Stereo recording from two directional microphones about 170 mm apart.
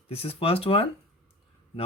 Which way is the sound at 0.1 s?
35° left (ahead or behind).